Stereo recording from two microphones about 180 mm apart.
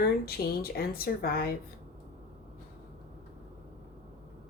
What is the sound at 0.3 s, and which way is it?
Speech, 55° left (ahead or behind).